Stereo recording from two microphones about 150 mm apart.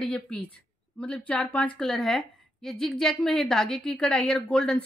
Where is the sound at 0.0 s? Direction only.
5° left (ahead or behind).